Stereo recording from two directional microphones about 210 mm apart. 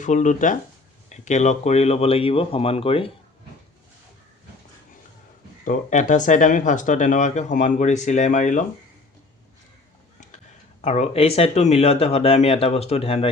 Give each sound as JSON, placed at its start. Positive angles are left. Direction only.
{"t": 0.0, "sound": "speech", "side_deg": 35}
{"t": 5.6, "sound": "speech", "side_deg": 35}
{"t": 10.8, "sound": "speech", "side_deg": 30}